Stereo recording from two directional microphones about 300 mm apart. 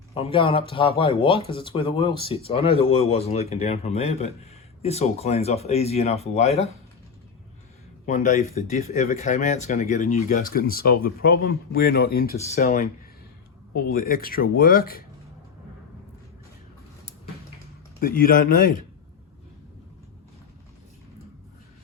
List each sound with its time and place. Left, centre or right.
0.1 s speech: centre
8.0 s speech: left
18.0 s speech: left